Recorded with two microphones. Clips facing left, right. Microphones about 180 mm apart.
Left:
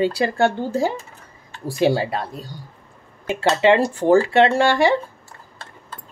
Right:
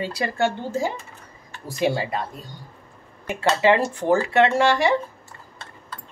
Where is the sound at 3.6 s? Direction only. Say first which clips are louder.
Left 4 dB; 30° left (ahead or behind).